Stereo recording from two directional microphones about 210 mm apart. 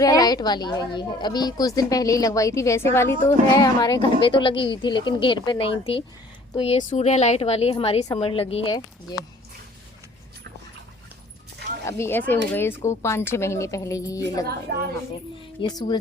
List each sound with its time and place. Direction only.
0.0 s a woman's voice: 15° left (ahead or behind)
11.9 s speech: 10° left (ahead or behind)
14.7 s a woman's voice: 45° right (ahead or behind)
15.6 s a woman's voice: 25° left (ahead or behind)